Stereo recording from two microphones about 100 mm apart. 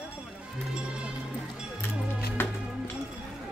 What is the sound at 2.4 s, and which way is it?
Music, 20° left (ahead or behind).